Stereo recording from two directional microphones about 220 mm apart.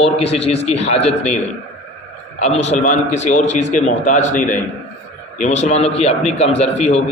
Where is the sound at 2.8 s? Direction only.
35° left (ahead or behind).